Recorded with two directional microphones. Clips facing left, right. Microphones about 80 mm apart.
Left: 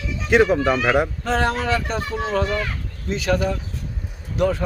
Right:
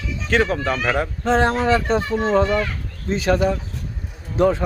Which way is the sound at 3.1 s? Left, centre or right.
Right.